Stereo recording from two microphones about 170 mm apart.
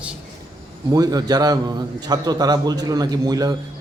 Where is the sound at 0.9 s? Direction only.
20° right (ahead or behind).